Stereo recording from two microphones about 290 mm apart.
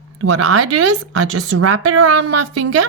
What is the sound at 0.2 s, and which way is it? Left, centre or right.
Speech, right.